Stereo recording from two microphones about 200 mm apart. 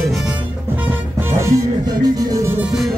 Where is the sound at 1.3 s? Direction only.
15° right (ahead or behind).